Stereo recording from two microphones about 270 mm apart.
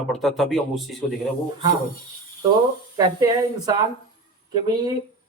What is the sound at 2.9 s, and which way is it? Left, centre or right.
Speech, centre.